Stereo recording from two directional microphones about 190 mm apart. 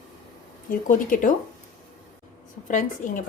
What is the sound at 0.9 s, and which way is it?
Speech, 45° left (ahead or behind).